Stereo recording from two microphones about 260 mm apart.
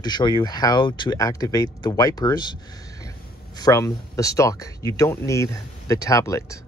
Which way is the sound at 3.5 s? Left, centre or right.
Centre.